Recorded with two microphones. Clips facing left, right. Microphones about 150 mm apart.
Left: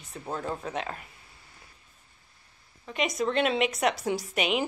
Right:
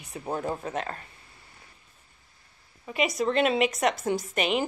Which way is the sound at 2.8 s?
5° right (ahead or behind).